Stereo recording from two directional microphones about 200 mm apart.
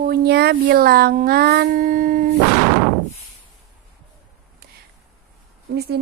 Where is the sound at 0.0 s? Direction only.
55° right (ahead or behind).